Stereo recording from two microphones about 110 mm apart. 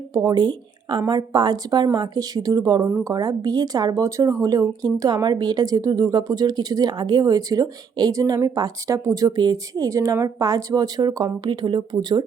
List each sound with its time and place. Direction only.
0.1 s a woman's voice: 35° right (ahead or behind)
2.8 s a woman's voice: 25° right (ahead or behind); by 12.2 s 45° right (ahead or behind)